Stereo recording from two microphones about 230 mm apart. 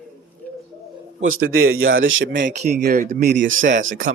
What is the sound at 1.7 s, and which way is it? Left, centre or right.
Speech, right.